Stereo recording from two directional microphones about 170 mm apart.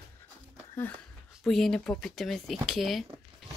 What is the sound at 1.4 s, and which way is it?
Speech, centre (ahead or behind).